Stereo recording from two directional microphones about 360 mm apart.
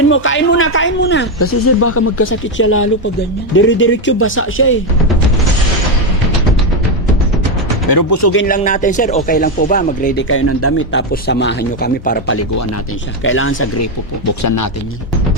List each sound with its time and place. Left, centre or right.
0.1 s speech: left
7.9 s speech: left
8.2 s speech: left
10.2 s speech: left
13.8 s speech: left